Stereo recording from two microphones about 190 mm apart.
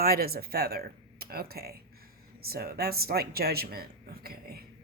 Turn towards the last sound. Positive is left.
turn(degrees=-55)  # may be behind; listen again after turning